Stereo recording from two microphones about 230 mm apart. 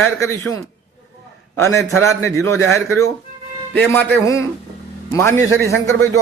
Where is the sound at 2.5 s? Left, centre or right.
Right.